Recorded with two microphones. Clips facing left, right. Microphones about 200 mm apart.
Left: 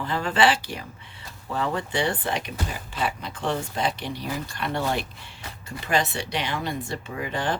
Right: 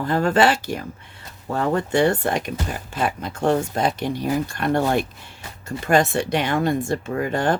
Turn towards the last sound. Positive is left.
turn(degrees=-50)  # may be behind; listen again after turning